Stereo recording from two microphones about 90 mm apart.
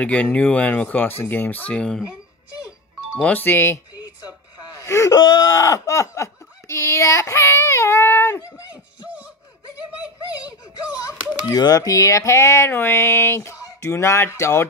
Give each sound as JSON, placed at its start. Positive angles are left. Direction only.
{"t": 0.0, "sound": "speech", "side_deg": 15}
{"t": 3.2, "sound": "speech", "side_deg": 15}
{"t": 4.7, "sound": "wail", "side_deg": 35}
{"t": 5.2, "sound": "speech", "side_deg": 55}
{"t": 5.6, "sound": "a sound", "side_deg": 35}
{"t": 11.5, "sound": "a sound", "side_deg": 45}